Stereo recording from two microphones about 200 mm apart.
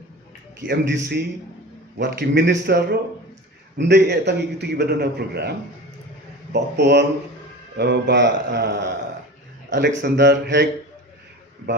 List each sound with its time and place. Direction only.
0.6 s a man's voice: 60° right (ahead or behind)